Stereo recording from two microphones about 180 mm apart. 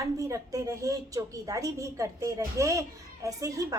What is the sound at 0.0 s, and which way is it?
A woman's voice, 15° right (ahead or behind).